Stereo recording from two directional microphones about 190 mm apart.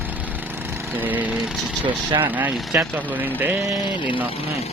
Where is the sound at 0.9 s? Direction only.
10° right (ahead or behind).